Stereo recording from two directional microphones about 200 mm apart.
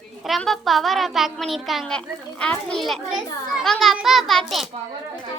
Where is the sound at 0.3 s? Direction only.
Centre (ahead or behind).